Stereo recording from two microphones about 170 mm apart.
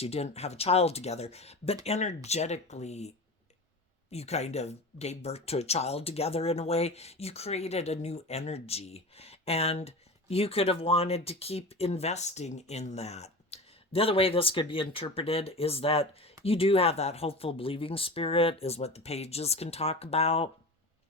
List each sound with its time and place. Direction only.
0.0 s speech: 40° left (ahead or behind)
4.1 s speech: 40° left (ahead or behind)